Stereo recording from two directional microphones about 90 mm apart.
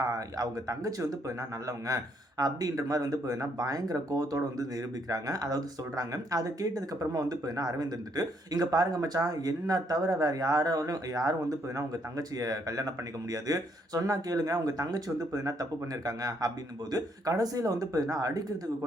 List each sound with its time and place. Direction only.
0.0 s speech: 40° right (ahead or behind)
2.4 s speech: 40° right (ahead or behind)